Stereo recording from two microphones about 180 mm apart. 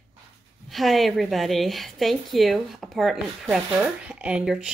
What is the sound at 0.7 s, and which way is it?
A woman's voice, centre (ahead or behind).